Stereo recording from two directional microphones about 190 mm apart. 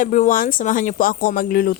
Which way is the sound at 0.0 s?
45° left (ahead or behind).